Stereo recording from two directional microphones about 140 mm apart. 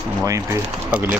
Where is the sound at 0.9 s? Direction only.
10° right (ahead or behind).